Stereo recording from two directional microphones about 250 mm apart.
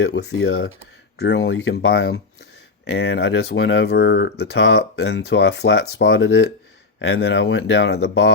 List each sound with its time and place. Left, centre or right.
0.0 s speech: left